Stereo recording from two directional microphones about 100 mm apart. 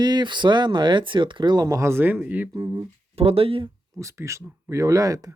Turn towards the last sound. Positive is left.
turn(degrees=-35)  # may be behind; listen again after turning